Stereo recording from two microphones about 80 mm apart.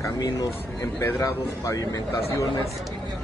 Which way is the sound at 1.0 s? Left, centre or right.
Left.